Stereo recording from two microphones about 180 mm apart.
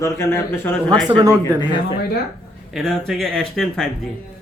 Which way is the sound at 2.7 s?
Centre (ahead or behind).